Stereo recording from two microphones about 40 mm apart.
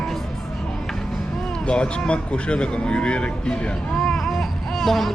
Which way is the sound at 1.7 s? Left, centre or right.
Left.